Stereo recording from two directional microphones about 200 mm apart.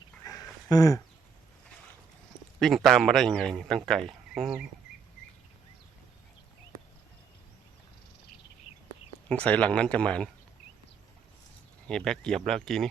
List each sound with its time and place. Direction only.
0.3 s a sound: 15° left (ahead or behind)
2.6 s a man's voice: centre (ahead or behind)
9.3 s speech: 5° left (ahead or behind)
11.9 s a man's voice: 5° left (ahead or behind)